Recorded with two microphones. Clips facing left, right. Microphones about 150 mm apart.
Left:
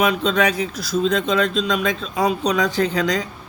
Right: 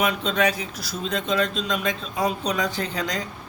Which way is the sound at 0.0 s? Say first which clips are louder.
Left 4 dB; 90° left.